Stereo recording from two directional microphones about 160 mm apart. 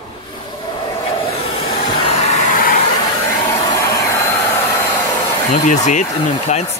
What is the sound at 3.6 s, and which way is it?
Hair dryer, 20° left (ahead or behind).